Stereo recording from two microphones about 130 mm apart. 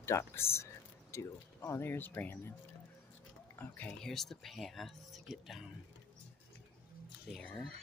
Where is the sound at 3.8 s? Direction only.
5° left (ahead or behind).